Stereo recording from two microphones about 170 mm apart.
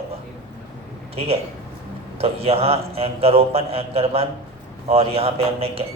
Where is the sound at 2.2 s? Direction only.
35° right (ahead or behind).